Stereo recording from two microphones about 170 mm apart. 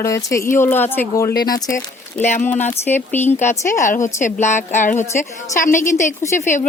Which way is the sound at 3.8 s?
50° left (ahead or behind).